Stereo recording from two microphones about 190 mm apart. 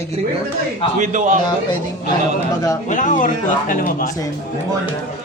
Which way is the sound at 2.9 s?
40° left (ahead or behind).